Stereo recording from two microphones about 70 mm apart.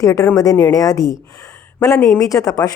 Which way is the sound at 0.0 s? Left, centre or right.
Left.